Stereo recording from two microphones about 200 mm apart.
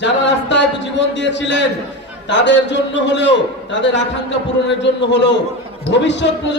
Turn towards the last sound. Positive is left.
turn(degrees=60)  # may be behind; listen again after turning